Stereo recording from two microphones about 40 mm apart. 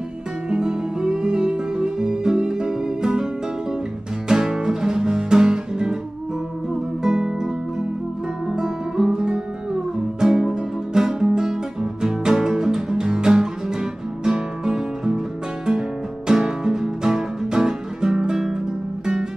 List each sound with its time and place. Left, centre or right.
0.5 s music: right
4.3 s music: centre
7.0 s music: centre
8.5 s music: centre
16.3 s music: centre